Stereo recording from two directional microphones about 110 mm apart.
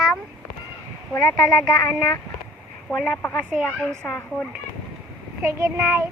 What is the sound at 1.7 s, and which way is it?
Speech, 35° left (ahead or behind).